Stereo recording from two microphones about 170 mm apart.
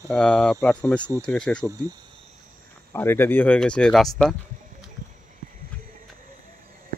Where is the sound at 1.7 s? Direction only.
20° right (ahead or behind).